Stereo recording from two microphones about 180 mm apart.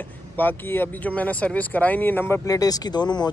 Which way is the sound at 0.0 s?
10° left (ahead or behind).